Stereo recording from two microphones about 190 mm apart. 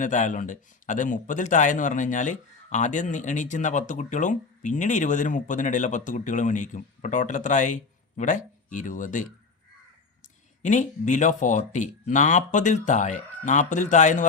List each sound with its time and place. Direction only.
0.0 s a man's voice: 40° left (ahead or behind)
10.6 s a man's voice: 40° left (ahead or behind)